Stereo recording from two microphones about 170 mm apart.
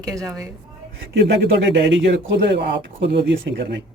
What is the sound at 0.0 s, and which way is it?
Speech, 20° right (ahead or behind).